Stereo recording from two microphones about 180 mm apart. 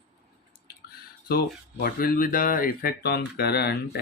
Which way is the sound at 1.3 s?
60° left (ahead or behind).